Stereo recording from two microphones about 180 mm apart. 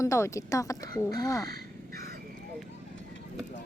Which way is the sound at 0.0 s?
15° left (ahead or behind).